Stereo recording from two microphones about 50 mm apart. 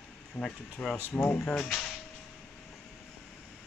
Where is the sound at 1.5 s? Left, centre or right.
Centre.